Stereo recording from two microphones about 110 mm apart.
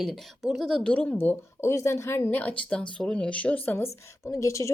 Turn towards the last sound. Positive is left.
turn(degrees=30)  # may be behind; listen again after turning